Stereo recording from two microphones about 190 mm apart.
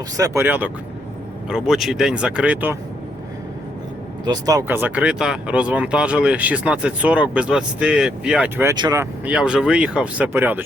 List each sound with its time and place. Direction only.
0.2 s speech: 10° right (ahead or behind)
4.3 s speech: 20° right (ahead or behind)
9.3 s speech: 5° right (ahead or behind)